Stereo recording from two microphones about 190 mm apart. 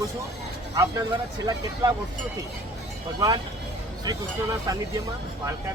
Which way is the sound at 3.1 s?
20° right (ahead or behind).